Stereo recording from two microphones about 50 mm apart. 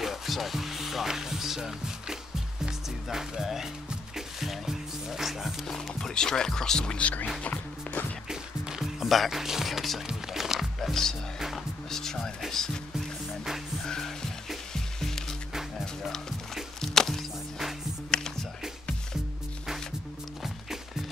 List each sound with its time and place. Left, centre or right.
0.0 s speech: centre
4.1 s music: centre
5.9 s speech: centre; by 7.2 s left
7.4 s music: left
8.3 s music: centre
9.1 s speech: centre
10.0 s music: centre
11.3 s music: centre
11.9 s music: centre
12.4 s speech: centre
13.8 s music: centre
18.1 s music: centre